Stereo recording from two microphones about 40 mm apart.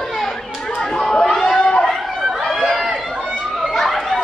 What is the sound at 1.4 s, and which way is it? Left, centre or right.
Chatter, centre.